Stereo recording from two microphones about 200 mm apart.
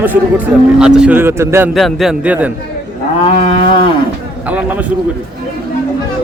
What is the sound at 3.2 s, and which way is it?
Cattle, 30° left (ahead or behind).